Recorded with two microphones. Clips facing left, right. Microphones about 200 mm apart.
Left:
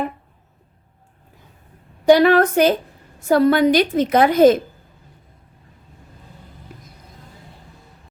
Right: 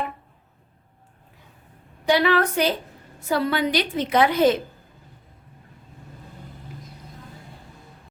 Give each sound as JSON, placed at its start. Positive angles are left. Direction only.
{"t": 2.0, "sound": "a woman's voice", "side_deg": 45}